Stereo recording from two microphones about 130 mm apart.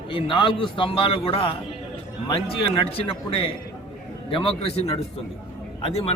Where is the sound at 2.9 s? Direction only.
45° left (ahead or behind).